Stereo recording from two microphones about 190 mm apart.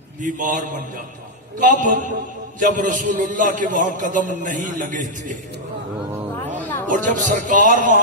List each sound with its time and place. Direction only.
0.2 s a man's voice: 40° right (ahead or behind)
6.5 s a man's voice: 45° right (ahead or behind)